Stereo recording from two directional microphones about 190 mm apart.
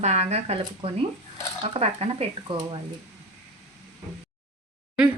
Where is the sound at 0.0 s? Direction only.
35° right (ahead or behind).